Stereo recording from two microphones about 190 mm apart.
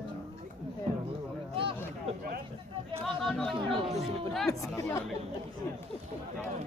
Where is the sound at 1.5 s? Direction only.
30° right (ahead or behind).